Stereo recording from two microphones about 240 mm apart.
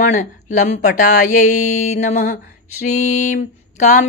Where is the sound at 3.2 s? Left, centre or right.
Left.